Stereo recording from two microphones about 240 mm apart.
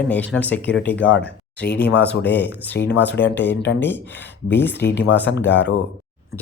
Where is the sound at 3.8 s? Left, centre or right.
Centre.